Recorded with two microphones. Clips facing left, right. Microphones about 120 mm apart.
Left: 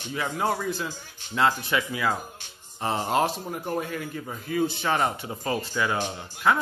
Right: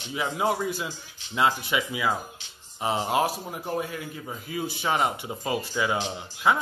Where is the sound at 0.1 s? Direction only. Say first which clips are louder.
Right 1 dB; 15° right (ahead or behind).